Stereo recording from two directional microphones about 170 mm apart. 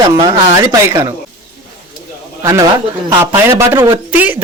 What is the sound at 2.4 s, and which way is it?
A man's voice, 20° right (ahead or behind).